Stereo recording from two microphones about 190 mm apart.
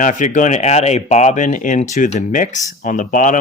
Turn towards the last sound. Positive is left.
turn(degrees=45)  # may be behind; listen again after turning